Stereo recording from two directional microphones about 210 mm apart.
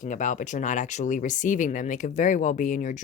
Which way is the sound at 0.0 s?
35° left (ahead or behind).